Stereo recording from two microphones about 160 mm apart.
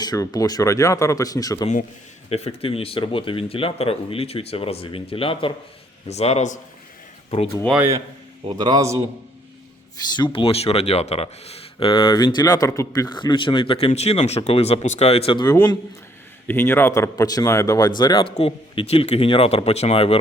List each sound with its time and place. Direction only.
0.0 s speech: 25° left (ahead or behind)
2.6 s a man's voice: 35° left (ahead or behind)
8.4 s a man's voice: 25° right (ahead or behind)
10.3 s speech: 35° left (ahead or behind)
16.5 s speech: 15° left (ahead or behind); by 20.1 s 35° left (ahead or behind)